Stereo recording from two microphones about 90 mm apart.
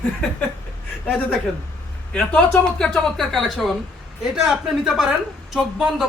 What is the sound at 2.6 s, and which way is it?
Speech, 10° left (ahead or behind).